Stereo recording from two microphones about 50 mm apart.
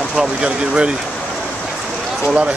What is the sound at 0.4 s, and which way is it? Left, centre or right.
Speech, centre.